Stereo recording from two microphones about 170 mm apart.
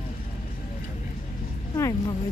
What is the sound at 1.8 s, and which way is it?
Music, 20° left (ahead or behind).